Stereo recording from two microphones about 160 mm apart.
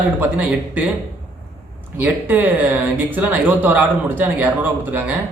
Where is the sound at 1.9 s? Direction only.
10° right (ahead or behind).